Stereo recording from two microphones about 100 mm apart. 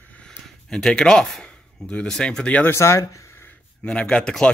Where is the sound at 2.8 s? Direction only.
30° left (ahead or behind).